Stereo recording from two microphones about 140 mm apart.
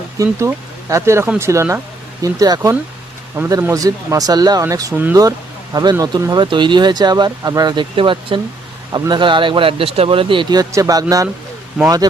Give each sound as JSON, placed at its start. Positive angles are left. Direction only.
{"t": 0.2, "sound": "speech", "side_deg": -20}